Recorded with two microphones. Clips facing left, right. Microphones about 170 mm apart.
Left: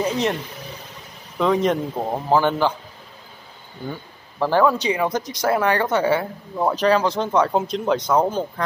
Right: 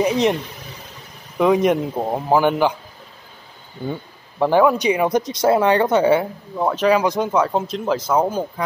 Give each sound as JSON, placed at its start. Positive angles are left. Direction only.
{"t": 0.0, "sound": "a sound", "side_deg": -15}
{"t": 1.4, "sound": "speech", "side_deg": -10}
{"t": 3.8, "sound": "speech", "side_deg": -20}
{"t": 6.5, "sound": "speech", "side_deg": 0}
{"t": 7.0, "sound": "speech", "side_deg": -10}